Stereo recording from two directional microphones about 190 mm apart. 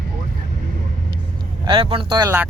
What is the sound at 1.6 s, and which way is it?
Speech, 25° right (ahead or behind).